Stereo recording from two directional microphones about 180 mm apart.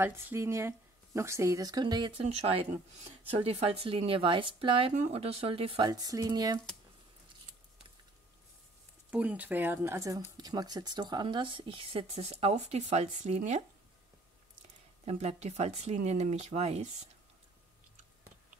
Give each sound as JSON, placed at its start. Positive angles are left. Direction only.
{"t": 0.0, "sound": "speech", "side_deg": -10}
{"t": 9.1, "sound": "speech", "side_deg": -10}
{"t": 15.0, "sound": "speech", "side_deg": -35}